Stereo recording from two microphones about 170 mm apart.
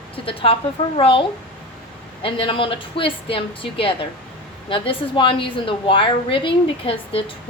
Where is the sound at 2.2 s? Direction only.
30° left (ahead or behind).